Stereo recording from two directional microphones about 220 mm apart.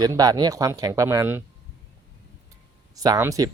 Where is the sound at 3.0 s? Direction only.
15° right (ahead or behind).